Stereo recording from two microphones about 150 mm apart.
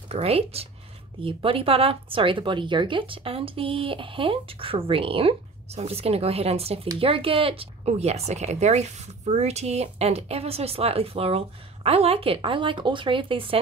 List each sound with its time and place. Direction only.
0.1 s speech: 40° right (ahead or behind)